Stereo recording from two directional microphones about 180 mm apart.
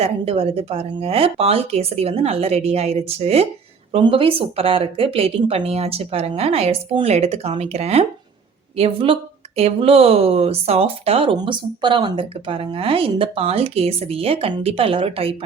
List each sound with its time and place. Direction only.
0.0 s speech: 35° right (ahead or behind)